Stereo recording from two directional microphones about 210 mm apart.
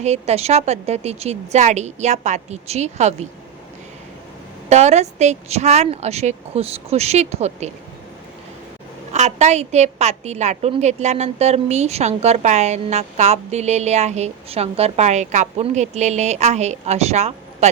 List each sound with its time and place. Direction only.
0.0 s a woman's voice: 30° right (ahead or behind)
4.7 s a woman's voice: 30° right (ahead or behind)
9.1 s a woman's voice: 30° right (ahead or behind)